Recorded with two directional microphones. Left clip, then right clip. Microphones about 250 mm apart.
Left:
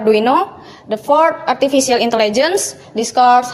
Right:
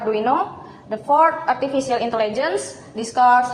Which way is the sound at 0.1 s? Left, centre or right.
Left.